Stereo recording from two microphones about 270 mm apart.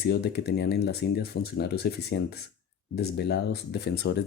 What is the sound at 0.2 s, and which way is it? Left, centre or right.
Speech, left.